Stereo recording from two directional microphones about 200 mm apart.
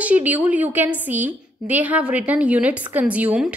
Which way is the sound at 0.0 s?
5° right (ahead or behind).